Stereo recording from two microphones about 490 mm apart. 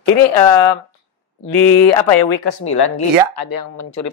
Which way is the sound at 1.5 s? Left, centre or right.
Left.